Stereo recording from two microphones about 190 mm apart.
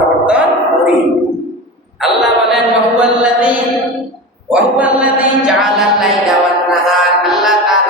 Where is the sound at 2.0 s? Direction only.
Centre (ahead or behind).